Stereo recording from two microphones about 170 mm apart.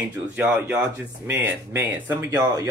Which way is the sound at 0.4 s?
10° right (ahead or behind).